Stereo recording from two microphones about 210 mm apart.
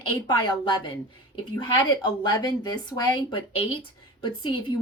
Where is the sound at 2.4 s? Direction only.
20° left (ahead or behind).